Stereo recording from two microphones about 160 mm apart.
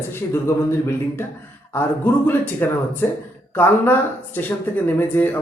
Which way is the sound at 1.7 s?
15° left (ahead or behind).